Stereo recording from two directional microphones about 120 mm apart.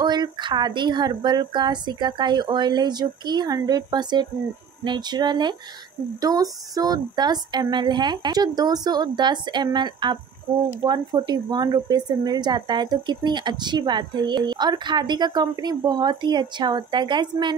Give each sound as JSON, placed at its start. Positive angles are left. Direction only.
{"t": 0.0, "sound": "speech", "side_deg": -35}